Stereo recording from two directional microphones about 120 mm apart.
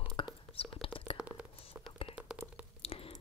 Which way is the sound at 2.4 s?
20° right (ahead or behind).